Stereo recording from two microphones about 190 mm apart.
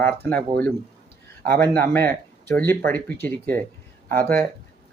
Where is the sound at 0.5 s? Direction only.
55° right (ahead or behind).